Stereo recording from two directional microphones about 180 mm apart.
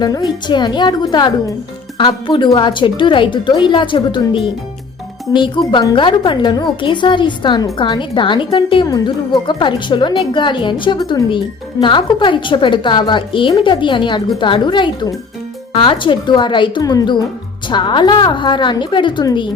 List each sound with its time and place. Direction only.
0.3 s speech: 25° left (ahead or behind)